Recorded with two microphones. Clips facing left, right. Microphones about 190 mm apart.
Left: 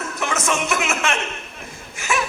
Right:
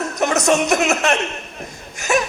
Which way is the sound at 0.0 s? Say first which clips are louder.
Right 6 dB; 40° right (ahead or behind).